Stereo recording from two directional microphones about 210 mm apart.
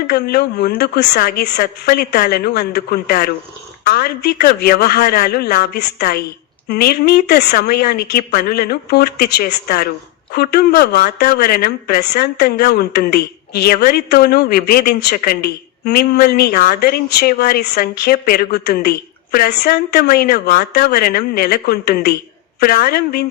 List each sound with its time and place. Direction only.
0.1 s a woman's voice: 50° left (ahead or behind)